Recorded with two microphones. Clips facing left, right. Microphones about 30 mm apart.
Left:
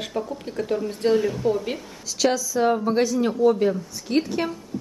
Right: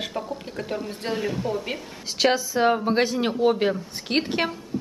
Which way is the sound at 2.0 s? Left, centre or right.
Right.